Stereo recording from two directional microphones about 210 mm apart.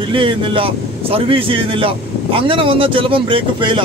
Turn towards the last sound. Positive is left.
turn(degrees=-25)  # may be behind; listen again after turning